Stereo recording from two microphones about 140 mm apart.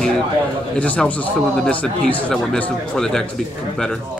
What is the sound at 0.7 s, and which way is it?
Speech, 10° left (ahead or behind).